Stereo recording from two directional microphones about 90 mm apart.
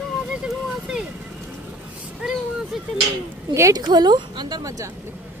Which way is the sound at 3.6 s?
35° right (ahead or behind).